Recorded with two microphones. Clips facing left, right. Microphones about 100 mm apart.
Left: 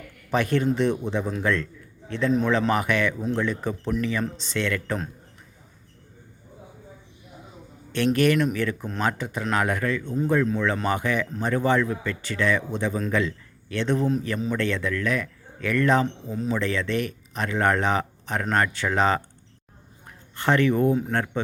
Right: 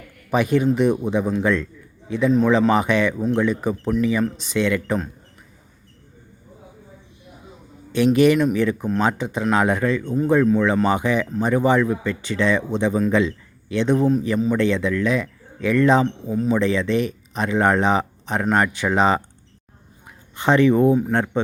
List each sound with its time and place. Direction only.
0.3 s a man's voice: 15° right (ahead or behind)
7.9 s speech: 15° right (ahead or behind)
20.3 s speech: 20° right (ahead or behind)